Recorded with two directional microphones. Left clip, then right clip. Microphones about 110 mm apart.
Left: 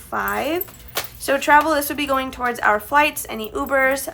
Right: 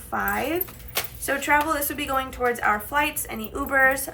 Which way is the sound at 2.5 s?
50° left (ahead or behind).